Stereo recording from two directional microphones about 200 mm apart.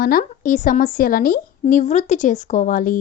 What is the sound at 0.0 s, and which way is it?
A woman's voice, 45° left (ahead or behind).